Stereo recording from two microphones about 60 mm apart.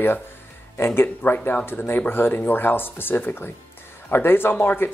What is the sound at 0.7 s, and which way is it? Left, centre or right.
Speech, left.